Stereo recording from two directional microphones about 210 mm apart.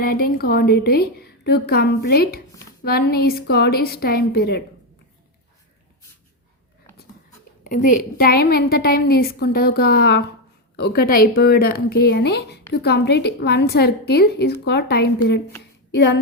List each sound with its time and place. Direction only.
0.0 s a woman's voice: 45° left (ahead or behind)
7.6 s a woman's voice: 40° left (ahead or behind); by 16.1 s 55° left (ahead or behind)